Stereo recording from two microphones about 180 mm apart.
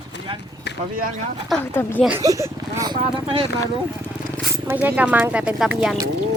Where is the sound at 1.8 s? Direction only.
10° left (ahead or behind).